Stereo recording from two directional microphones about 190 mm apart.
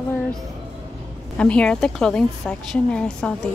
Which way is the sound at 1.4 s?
5° left (ahead or behind).